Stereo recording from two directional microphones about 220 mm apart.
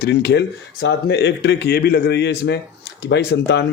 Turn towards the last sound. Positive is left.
turn(degrees=50)  # may be behind; listen again after turning